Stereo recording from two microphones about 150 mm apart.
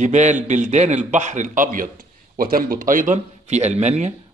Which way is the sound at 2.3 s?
75° right (ahead or behind).